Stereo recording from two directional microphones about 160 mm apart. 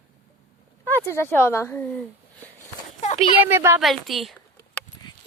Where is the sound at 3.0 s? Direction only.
45° left (ahead or behind).